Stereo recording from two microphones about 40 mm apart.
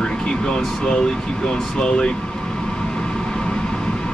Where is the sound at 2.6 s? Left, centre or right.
Centre.